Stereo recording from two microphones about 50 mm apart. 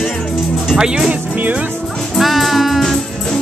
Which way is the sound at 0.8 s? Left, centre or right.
Centre.